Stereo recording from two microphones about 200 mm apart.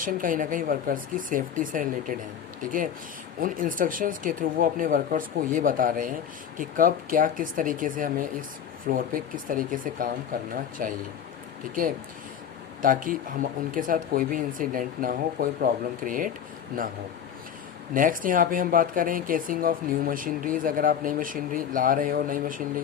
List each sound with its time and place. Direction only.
0.0 s speech: 45° right (ahead or behind)
12.8 s speech: 45° right (ahead or behind)
17.9 s speech: 45° right (ahead or behind)